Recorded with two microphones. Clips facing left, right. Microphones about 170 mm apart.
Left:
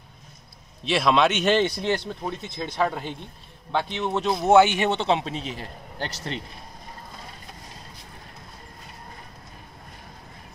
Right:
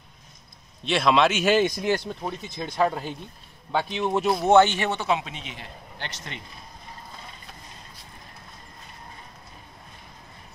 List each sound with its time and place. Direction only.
0.8 s speech: centre (ahead or behind)
4.5 s a man's voice: 10° left (ahead or behind); by 6.4 s 35° left (ahead or behind)